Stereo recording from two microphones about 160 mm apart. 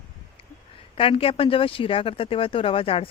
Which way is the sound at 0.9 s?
35° left (ahead or behind).